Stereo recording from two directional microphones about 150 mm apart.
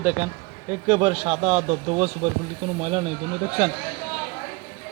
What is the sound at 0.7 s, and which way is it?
Speech, 35° right (ahead or behind).